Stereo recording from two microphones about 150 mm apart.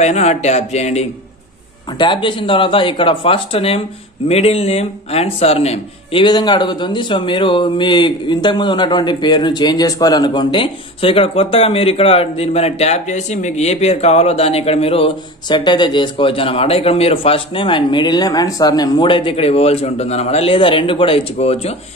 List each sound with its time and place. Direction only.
0.0 s speech: 50° left (ahead or behind)
2.0 s speech: 30° left (ahead or behind)
6.2 s speech: 30° left (ahead or behind)